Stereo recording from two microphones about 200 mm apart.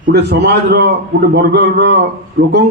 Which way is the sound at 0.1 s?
55° right (ahead or behind).